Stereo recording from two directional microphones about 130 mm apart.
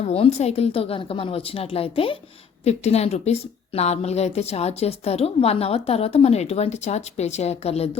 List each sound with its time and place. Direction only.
0.0 s a woman's voice: 55° left (ahead or behind)